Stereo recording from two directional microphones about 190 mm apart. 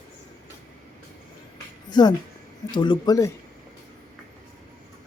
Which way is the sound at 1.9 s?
20° left (ahead or behind).